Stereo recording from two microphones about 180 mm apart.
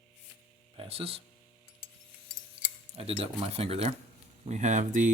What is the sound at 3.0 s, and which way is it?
Speech, 30° right (ahead or behind).